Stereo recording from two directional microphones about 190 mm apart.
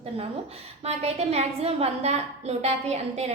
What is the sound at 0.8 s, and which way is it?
A woman's voice, 35° right (ahead or behind).